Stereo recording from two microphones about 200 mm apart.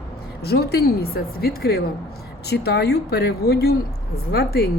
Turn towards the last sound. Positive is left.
turn(degrees=50)  # may be behind; listen again after turning